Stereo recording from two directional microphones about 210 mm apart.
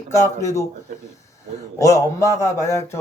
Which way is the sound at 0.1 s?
15° left (ahead or behind).